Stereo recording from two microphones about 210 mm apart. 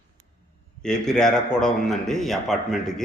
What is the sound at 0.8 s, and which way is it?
A man's voice, 5° left (ahead or behind).